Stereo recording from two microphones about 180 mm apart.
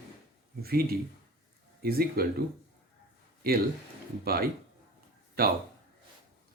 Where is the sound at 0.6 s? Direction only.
60° right (ahead or behind).